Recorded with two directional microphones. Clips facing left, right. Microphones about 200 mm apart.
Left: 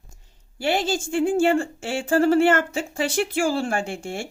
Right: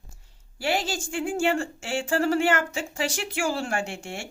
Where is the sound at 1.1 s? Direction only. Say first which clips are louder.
Left 6 dB; 35° left (ahead or behind).